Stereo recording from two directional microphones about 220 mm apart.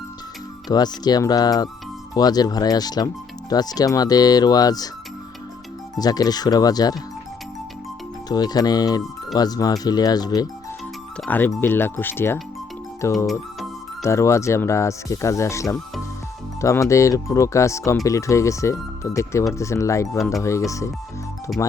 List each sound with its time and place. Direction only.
0.7 s speech: 20° left (ahead or behind)
6.0 s speech: 15° left (ahead or behind)
8.3 s speech: 15° left (ahead or behind)